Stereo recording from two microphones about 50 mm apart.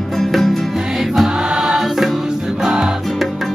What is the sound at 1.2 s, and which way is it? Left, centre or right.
Music, centre.